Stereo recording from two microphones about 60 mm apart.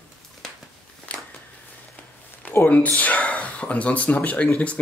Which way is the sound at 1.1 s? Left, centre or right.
Left.